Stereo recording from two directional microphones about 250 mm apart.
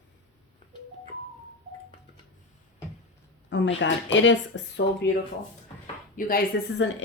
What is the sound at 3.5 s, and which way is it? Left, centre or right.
A woman's voice, left.